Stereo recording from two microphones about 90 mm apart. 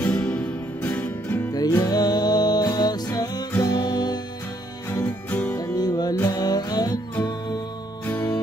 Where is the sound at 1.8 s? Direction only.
45° left (ahead or behind).